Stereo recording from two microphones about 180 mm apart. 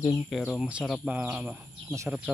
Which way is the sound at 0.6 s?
5° right (ahead or behind).